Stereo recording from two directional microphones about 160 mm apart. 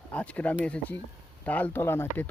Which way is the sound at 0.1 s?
10° left (ahead or behind).